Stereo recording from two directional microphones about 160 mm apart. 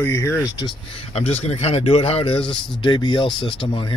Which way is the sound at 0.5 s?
35° left (ahead or behind).